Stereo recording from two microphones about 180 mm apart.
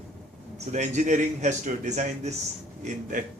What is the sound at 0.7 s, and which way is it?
A man's voice, 40° right (ahead or behind).